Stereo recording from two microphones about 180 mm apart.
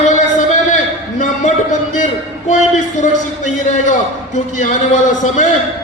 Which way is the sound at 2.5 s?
45° left (ahead or behind).